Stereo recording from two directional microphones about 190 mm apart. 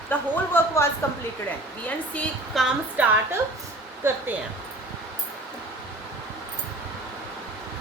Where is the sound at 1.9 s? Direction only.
5° left (ahead or behind).